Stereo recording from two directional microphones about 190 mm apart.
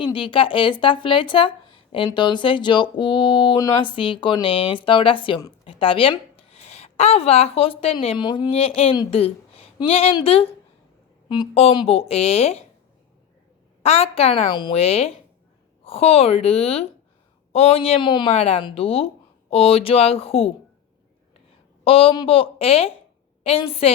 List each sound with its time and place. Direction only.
0.0 s speech: 25° left (ahead or behind)
13.8 s speech: 35° left (ahead or behind)
21.8 s speech: 30° left (ahead or behind)